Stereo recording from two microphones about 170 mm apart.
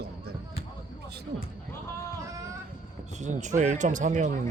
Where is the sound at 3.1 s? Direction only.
45° right (ahead or behind).